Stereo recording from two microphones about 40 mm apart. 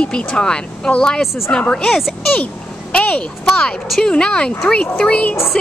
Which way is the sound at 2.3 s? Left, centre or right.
Left.